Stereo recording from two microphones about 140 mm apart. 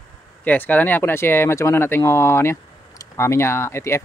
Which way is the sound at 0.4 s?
10° left (ahead or behind).